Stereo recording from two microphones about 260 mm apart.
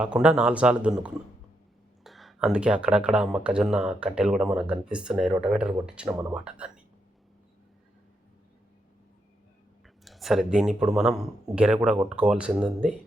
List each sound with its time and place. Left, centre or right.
0.0 s speech: centre
2.0 s speech: centre
9.8 s a sound: centre
10.9 s speech: centre